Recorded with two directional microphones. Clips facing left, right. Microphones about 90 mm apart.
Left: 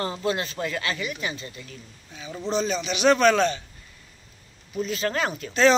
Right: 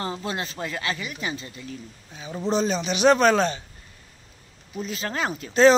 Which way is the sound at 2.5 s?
35° right (ahead or behind).